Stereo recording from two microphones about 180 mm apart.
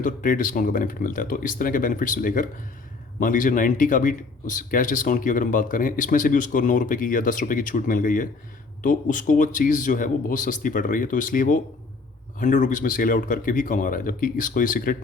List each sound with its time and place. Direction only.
0.0 s speech: 50° left (ahead or behind)